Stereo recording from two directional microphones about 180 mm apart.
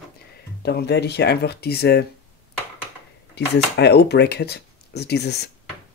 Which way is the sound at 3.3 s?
70° left (ahead or behind).